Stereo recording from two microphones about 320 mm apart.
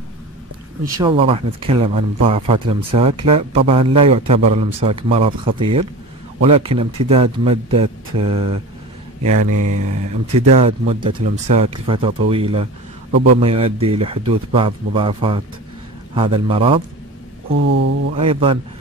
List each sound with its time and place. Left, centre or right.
0.9 s speech: centre
9.2 s speech: right
10.3 s speech: centre
17.5 s speech: right
18.1 s speech: centre